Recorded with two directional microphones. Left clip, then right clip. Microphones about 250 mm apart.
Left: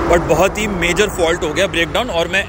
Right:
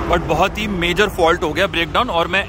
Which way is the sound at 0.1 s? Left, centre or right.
Centre.